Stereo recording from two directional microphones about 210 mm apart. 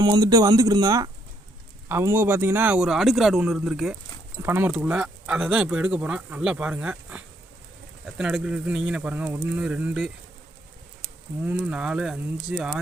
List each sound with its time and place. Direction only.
0.0 s speech: 15° right (ahead or behind)
8.2 s speech: 5° right (ahead or behind)
11.4 s speech: 5° right (ahead or behind)